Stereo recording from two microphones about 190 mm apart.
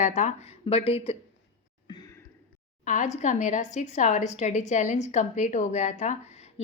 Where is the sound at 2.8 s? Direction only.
40° left (ahead or behind).